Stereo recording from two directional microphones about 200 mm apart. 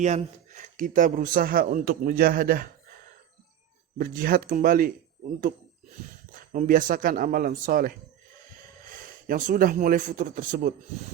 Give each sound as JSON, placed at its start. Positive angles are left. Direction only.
{"t": 0.0, "sound": "speech", "side_deg": -35}
{"t": 3.9, "sound": "speech", "side_deg": -45}
{"t": 6.5, "sound": "speech", "side_deg": -40}